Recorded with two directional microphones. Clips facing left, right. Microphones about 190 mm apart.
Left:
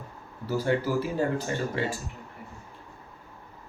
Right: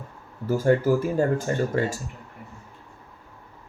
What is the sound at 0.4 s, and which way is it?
Speech, 45° right (ahead or behind).